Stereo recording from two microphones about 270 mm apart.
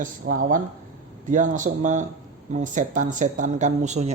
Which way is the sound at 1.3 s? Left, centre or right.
Right.